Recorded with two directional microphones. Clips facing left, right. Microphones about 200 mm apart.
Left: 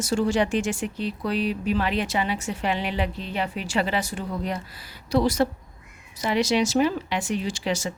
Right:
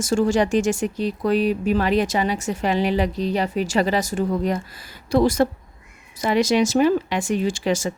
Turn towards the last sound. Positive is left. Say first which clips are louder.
# right 5 dB
turn(degrees=-50)  # may be behind; listen again after turning